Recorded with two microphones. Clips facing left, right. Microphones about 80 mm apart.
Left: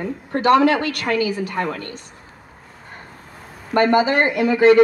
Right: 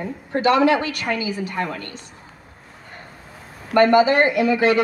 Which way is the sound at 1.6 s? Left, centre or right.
Left.